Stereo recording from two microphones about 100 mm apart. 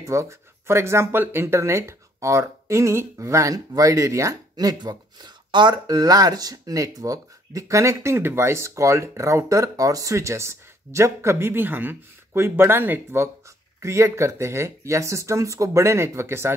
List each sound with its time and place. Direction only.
0.0 s speech: 30° right (ahead or behind)